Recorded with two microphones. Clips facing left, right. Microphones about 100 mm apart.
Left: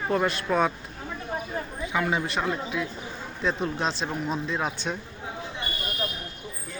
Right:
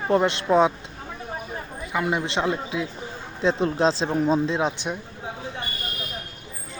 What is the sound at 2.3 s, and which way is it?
Speech, 25° right (ahead or behind).